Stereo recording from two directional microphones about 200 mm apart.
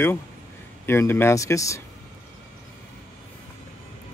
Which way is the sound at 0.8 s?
10° left (ahead or behind).